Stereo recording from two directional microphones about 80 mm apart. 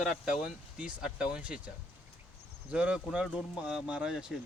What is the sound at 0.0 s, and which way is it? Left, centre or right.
Speech, centre.